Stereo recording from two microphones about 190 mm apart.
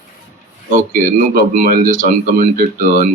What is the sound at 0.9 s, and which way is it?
Speech, 45° right (ahead or behind).